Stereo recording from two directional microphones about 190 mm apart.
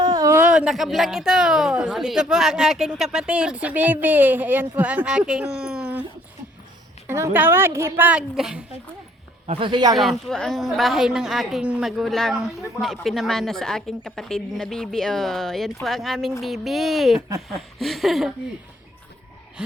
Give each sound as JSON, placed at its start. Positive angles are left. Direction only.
{"t": 0.0, "sound": "a woman's voice", "side_deg": -15}
{"t": 7.1, "sound": "speech", "side_deg": -10}
{"t": 9.5, "sound": "speech", "side_deg": -25}
{"t": 9.9, "sound": "a woman's voice", "side_deg": 0}
{"t": 17.2, "sound": "speech", "side_deg": -20}
{"t": 17.6, "sound": "a woman's voice", "side_deg": 0}
{"t": 19.6, "sound": "a woman's voice", "side_deg": -5}